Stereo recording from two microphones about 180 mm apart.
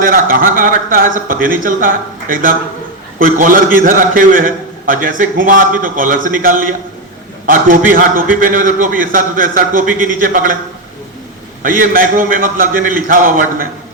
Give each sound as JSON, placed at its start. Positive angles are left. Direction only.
{"t": 0.0, "sound": "a man's voice", "side_deg": -50}
{"t": 11.6, "sound": "a man's voice", "side_deg": -50}